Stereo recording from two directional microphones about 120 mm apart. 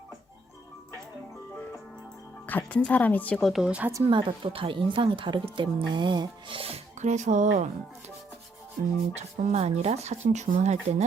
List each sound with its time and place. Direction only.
2.5 s speech: 10° left (ahead or behind); by 3.9 s 10° right (ahead or behind)
4.0 s a woman's voice: 45° right (ahead or behind)
7.0 s speech: 80° right
9.1 s speech: 70° right (ahead or behind)